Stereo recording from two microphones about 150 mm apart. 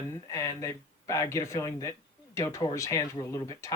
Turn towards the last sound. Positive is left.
turn(degrees=20)  # may be behind; listen again after turning